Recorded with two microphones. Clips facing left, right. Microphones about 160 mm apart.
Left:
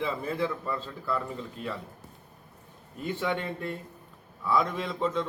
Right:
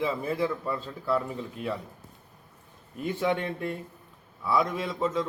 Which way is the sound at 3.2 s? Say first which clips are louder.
Right 4 dB; 10° right (ahead or behind).